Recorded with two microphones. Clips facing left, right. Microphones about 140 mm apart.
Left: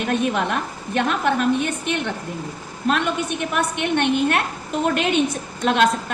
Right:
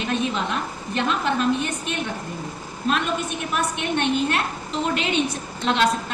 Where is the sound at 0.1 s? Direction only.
60° left (ahead or behind).